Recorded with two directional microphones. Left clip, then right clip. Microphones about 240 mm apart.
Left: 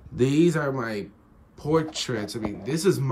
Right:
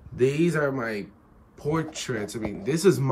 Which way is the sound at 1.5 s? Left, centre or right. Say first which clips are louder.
Left 4 dB; left.